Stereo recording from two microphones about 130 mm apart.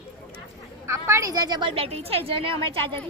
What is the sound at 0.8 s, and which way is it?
A woman's voice, 20° right (ahead or behind).